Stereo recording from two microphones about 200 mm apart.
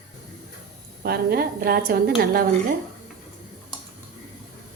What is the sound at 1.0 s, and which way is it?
A woman's voice, 50° right (ahead or behind).